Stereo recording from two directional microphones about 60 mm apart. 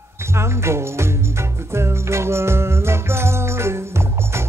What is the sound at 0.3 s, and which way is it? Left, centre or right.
Music, right.